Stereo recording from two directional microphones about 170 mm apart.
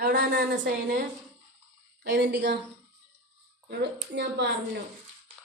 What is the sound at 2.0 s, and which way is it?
Speech, 85° right.